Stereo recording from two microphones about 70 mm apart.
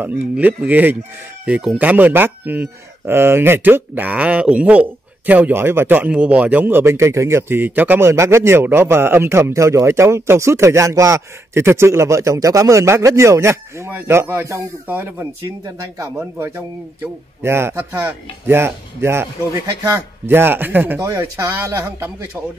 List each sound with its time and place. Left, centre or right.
0.0 s a man's voice: right
8.0 s a man's voice: right
13.8 s a man's voice: right
14.9 s a man's voice: right
16.3 s a man's voice: right
21.0 s a man's voice: right